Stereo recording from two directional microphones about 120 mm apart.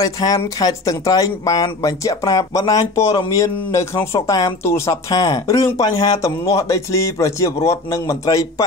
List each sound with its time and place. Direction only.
0.0 s speech: 30° left (ahead or behind)